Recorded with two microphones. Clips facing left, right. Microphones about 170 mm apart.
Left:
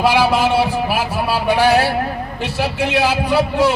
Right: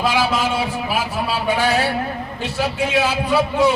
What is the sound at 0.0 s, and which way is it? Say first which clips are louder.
Speech: left 5 dB; 65° left (ahead or behind).